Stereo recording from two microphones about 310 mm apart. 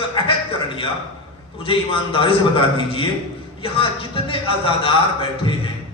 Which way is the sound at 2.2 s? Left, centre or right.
Centre.